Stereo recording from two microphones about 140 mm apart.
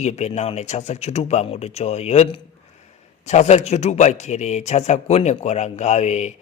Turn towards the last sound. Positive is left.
turn(degrees=50)  # may be behind; listen again after turning